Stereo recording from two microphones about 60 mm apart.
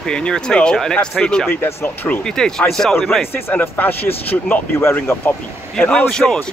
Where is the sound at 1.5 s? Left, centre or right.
Left.